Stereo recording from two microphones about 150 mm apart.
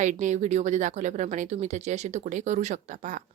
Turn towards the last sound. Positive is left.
turn(degrees=-55)  # may be behind; listen again after turning